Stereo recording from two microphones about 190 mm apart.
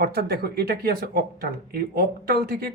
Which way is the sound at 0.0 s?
55° right (ahead or behind).